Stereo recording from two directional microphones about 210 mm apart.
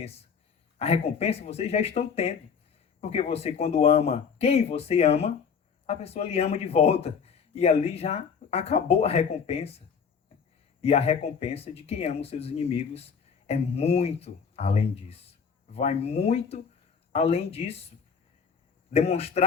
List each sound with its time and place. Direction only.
0.8 s speech: 30° left (ahead or behind)
18.9 s speech: 30° left (ahead or behind)